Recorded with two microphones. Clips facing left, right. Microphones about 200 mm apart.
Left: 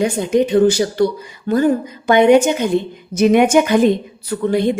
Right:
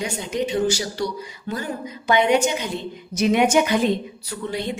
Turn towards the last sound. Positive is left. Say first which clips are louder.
# left 11 dB
turn(degrees=50)  # may be behind; listen again after turning